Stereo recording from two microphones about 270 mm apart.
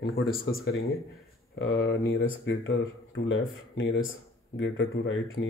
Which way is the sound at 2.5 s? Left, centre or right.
Left.